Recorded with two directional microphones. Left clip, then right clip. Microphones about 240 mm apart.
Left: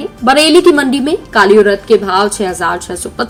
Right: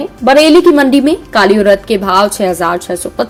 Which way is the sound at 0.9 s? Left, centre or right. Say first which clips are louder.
Right 1 dB; right.